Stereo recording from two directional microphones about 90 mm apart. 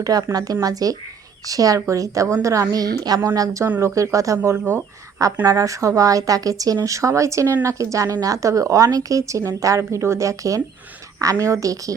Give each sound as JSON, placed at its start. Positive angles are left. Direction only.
{"t": 0.0, "sound": "speech", "side_deg": -45}
{"t": 5.5, "sound": "speech", "side_deg": -40}